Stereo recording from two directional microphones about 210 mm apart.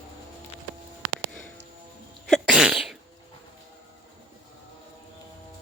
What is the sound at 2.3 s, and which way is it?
Sneeze, centre (ahead or behind).